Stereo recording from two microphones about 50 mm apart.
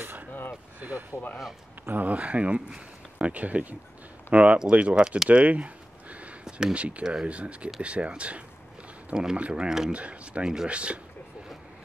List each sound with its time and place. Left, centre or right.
0.0 s a sound: right
0.7 s speech: right
5.3 s a sound: right
6.7 s speech: right
9.1 s speech: centre
9.9 s speech: right